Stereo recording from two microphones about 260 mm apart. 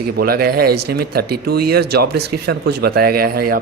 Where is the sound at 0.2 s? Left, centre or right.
Right.